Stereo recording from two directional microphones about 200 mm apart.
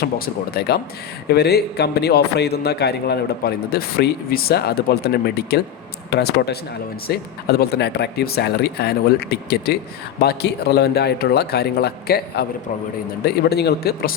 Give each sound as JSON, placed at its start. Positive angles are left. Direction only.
{"t": 1.3, "sound": "a man's voice", "side_deg": 55}